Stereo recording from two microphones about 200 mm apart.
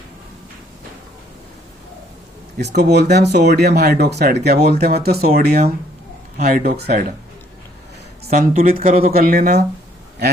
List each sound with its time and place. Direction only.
2.6 s speech: 55° right (ahead or behind)
8.4 s speech: 30° right (ahead or behind)
9.1 s speech: 45° right (ahead or behind)